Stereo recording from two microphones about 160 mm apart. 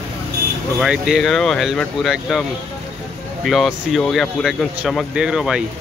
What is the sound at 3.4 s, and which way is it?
Speech, centre (ahead or behind).